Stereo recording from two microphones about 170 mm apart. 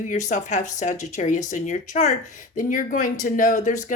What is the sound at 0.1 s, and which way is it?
A woman's voice, 45° left (ahead or behind).